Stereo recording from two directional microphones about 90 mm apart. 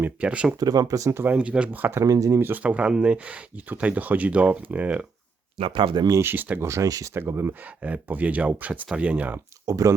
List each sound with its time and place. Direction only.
0.0 s speech: 15° right (ahead or behind)
0.6 s speech: 45° right (ahead or behind)
1.2 s speech: 15° right (ahead or behind); by 2.4 s 40° right (ahead or behind)
2.4 s speech: 20° right (ahead or behind)
5.5 s speech: 75° right (ahead or behind)
6.2 s speech: 20° right (ahead or behind)
6.7 s speech: 35° right (ahead or behind)
7.1 s speech: 25° right (ahead or behind)
7.6 s speech: 15° right (ahead or behind)
9.6 s speech: 40° right (ahead or behind)